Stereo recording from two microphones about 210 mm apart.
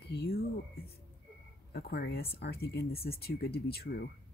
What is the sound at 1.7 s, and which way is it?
Speech, 50° left (ahead or behind).